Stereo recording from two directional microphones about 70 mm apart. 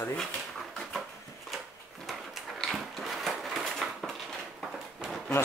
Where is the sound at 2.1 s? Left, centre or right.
Centre.